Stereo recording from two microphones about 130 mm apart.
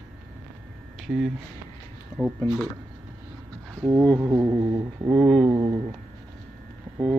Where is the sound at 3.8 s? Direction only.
20° right (ahead or behind).